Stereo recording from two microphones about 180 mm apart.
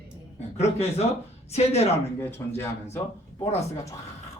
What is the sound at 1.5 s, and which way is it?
Speech, 35° left (ahead or behind).